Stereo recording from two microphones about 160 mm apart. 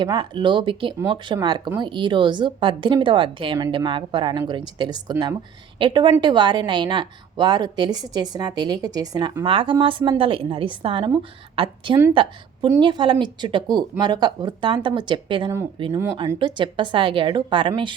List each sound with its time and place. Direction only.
0.0 s a woman's voice: 30° right (ahead or behind)